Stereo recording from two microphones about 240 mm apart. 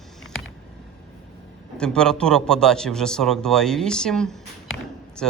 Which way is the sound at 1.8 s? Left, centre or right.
Centre.